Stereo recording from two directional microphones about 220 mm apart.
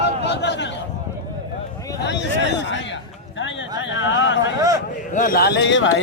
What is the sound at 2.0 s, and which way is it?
Speech, 50° left (ahead or behind).